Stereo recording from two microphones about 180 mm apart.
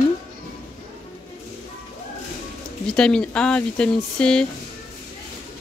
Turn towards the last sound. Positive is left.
turn(degrees=5)  # may be behind; listen again after turning